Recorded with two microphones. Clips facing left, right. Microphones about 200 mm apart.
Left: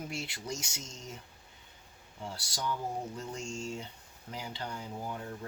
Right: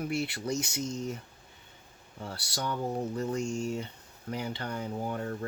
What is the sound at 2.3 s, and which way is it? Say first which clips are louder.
Speech: right 2 dB; 65° right (ahead or behind).